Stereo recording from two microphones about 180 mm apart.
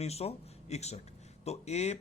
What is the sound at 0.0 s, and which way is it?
A man's voice, 35° left (ahead or behind).